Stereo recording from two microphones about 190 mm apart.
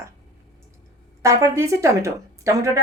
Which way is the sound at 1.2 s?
15° right (ahead or behind).